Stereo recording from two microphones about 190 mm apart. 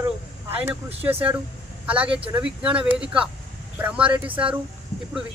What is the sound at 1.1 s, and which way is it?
Speech, 30° right (ahead or behind).